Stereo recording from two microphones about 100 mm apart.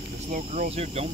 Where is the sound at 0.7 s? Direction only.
90° right.